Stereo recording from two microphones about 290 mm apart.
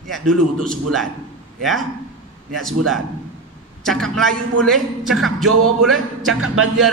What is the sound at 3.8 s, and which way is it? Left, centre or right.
Speech, centre.